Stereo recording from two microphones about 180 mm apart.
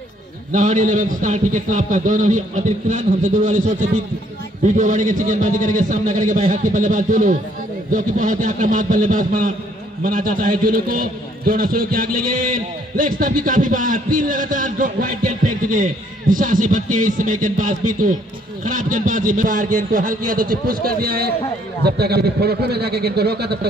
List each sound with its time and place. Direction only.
0.5 s a man's voice: 45° right (ahead or behind); by 23.7 s 65° right (ahead or behind)